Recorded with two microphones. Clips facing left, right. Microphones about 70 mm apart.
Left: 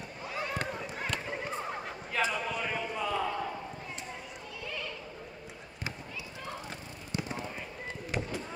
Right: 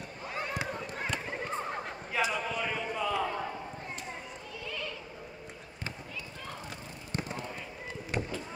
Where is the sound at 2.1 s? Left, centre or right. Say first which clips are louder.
Even; centre.